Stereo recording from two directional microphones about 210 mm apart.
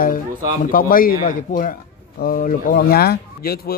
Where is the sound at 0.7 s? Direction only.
40° left (ahead or behind).